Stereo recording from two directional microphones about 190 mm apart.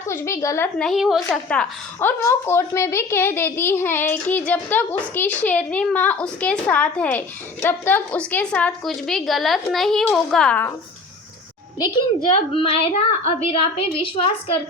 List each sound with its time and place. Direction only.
0.0 s a woman's voice: 15° left (ahead or behind)
0.9 s a woman's voice: centre (ahead or behind)
12.5 s a woman's voice: 30° left (ahead or behind)